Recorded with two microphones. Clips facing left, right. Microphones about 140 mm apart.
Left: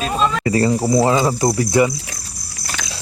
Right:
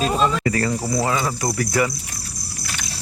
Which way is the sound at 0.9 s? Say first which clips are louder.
Left 7 dB; 30° left (ahead or behind).